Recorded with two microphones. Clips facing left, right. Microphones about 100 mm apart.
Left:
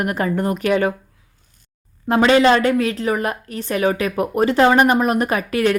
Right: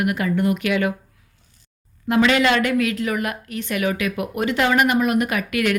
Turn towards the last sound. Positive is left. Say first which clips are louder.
# left 3 dB
turn(degrees=30)  # may be behind; listen again after turning